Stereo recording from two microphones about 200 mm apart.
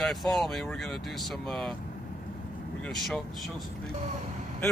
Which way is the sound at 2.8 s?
5° left (ahead or behind).